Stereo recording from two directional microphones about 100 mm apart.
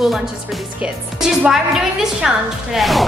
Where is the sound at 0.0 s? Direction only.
Centre (ahead or behind).